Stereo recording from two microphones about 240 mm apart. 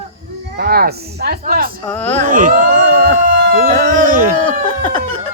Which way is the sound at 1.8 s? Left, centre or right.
Centre.